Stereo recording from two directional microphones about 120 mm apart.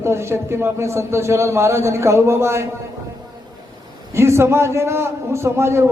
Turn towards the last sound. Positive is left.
turn(degrees=-20)  # may be behind; listen again after turning